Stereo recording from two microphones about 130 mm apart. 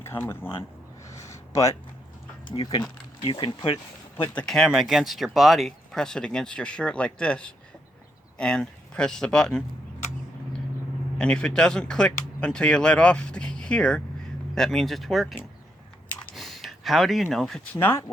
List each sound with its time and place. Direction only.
0.0 s speech: 20° left (ahead or behind)
1.0 s a sound: 25° left (ahead or behind)
2.6 s speech: 40° left (ahead or behind)
4.4 s speech: centre (ahead or behind)
11.2 s speech: 5° left (ahead or behind)
16.3 s a sound: centre (ahead or behind)
17.7 s speech: 15° left (ahead or behind)